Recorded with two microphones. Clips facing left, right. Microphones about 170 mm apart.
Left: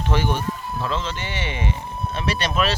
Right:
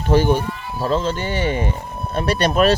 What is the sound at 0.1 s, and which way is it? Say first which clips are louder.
Speech: right 8 dB; 40° right (ahead or behind).